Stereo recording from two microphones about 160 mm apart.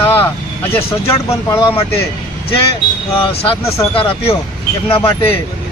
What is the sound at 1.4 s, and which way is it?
Speech, 15° left (ahead or behind).